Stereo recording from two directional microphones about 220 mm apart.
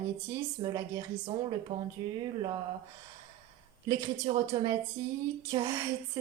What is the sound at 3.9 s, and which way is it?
A woman's voice, 15° right (ahead or behind).